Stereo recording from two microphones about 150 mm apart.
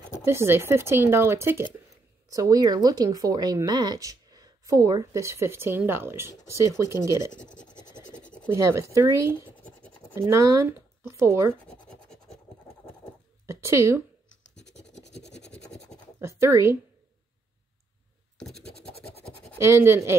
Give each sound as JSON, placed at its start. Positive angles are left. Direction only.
{"t": 0.2, "sound": "a woman's voice", "side_deg": -15}
{"t": 8.1, "sound": "scratch", "side_deg": 10}
{"t": 8.5, "sound": "a woman's voice", "side_deg": -20}
{"t": 9.5, "sound": "scratch", "side_deg": 10}
{"t": 10.1, "sound": "speech", "side_deg": -20}
{"t": 11.6, "sound": "scratch", "side_deg": 5}
{"t": 13.5, "sound": "speech", "side_deg": -20}
{"t": 15.0, "sound": "scratch", "side_deg": 50}
{"t": 16.2, "sound": "speech", "side_deg": -20}
{"t": 18.6, "sound": "scratch", "side_deg": 40}
{"t": 19.6, "sound": "speech", "side_deg": -15}